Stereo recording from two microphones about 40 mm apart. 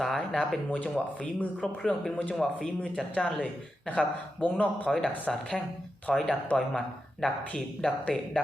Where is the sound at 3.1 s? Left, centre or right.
Left.